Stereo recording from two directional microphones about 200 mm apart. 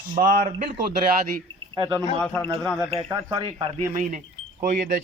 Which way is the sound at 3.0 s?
20° right (ahead or behind).